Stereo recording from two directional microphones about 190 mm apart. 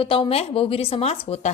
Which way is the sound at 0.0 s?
30° left (ahead or behind).